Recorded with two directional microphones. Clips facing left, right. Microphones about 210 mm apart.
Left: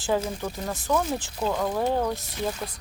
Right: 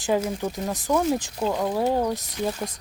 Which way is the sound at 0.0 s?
15° right (ahead or behind).